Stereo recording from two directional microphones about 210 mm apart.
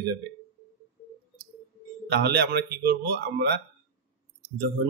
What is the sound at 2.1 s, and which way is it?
Speech, 50° right (ahead or behind).